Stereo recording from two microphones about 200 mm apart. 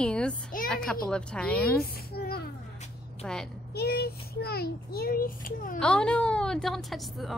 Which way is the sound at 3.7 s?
50° left (ahead or behind).